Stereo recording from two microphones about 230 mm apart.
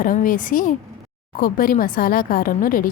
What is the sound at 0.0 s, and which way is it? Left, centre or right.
A woman's voice, left.